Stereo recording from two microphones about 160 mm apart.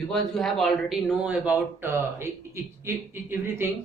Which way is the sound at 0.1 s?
Centre (ahead or behind).